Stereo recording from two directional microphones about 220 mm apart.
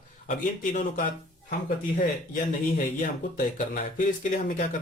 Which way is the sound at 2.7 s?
40° left (ahead or behind).